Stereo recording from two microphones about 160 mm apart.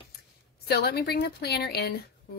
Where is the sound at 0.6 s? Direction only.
90° left.